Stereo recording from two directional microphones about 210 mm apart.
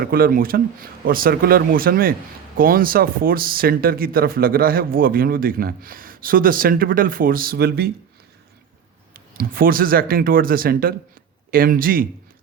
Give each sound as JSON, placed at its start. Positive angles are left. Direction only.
{"t": 0.0, "sound": "speech", "side_deg": -45}
{"t": 9.1, "sound": "speech", "side_deg": -45}